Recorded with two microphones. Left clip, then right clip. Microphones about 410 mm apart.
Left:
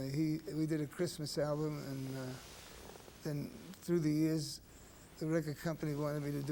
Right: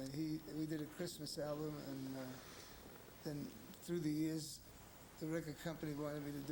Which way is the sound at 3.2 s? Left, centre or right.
Left.